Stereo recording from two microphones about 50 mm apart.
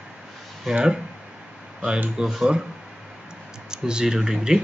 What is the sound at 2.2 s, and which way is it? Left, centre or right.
Speech, centre.